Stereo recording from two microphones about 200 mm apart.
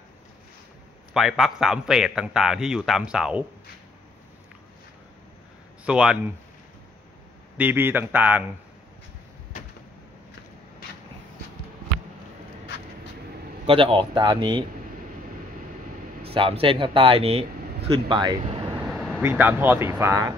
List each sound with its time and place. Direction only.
1.1 s a man's voice: centre (ahead or behind)
5.9 s a man's voice: 5° right (ahead or behind)
7.5 s a man's voice: 10° right (ahead or behind)
13.7 s speech: 25° right (ahead or behind)
16.3 s speech: 30° right (ahead or behind)
18.8 s speech: centre (ahead or behind)